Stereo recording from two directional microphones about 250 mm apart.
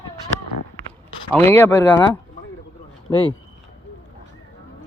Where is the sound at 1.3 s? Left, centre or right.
Centre.